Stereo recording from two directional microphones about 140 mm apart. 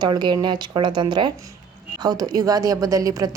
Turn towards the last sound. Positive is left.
turn(degrees=-25)  # may be behind; listen again after turning